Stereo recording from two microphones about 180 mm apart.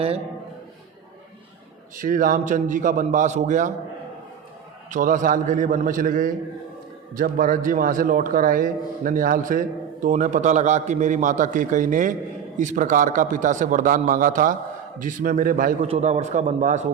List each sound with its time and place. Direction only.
2.0 s a man's voice: 50° right (ahead or behind)
4.9 s a man's voice: 45° right (ahead or behind)
15.9 s a man's voice: 35° right (ahead or behind)